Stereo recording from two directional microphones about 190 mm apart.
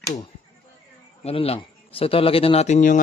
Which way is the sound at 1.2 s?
30° left (ahead or behind).